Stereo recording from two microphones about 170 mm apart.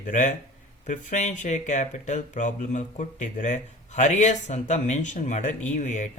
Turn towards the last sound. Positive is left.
turn(degrees=45)  # may be behind; listen again after turning